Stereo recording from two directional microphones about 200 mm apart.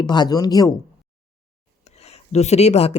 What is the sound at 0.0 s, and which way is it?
Speech, 20° left (ahead or behind).